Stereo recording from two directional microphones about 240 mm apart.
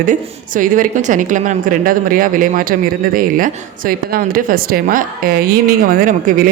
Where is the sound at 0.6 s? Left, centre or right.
Right.